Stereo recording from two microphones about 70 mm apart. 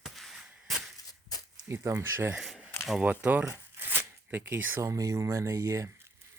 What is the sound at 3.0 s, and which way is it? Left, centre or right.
Speech, centre.